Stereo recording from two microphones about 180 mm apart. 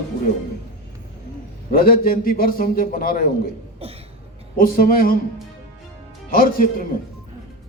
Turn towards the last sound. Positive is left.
turn(degrees=50)  # may be behind; listen again after turning